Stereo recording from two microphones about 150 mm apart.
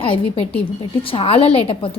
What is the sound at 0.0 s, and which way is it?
A woman's voice, 40° left (ahead or behind).